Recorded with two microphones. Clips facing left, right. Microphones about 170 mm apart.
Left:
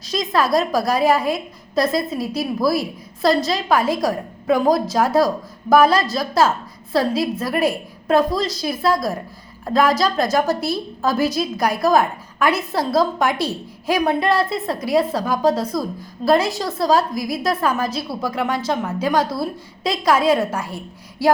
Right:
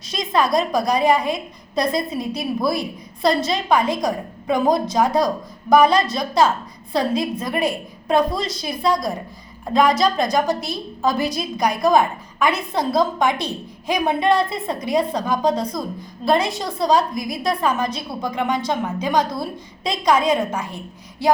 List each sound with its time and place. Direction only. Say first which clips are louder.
0.1 s a woman's voice: left 1 dB; centre (ahead or behind)